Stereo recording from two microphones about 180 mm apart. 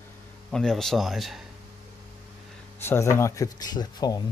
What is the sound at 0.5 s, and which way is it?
Speech, centre (ahead or behind).